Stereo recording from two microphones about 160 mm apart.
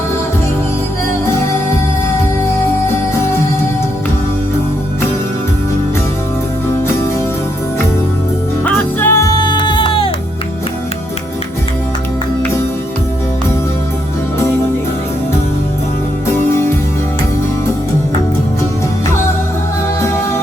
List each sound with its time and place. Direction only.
8.6 s music: 10° left (ahead or behind); by 10.1 s 35° left (ahead or behind)
16.2 s music: 15° left (ahead or behind)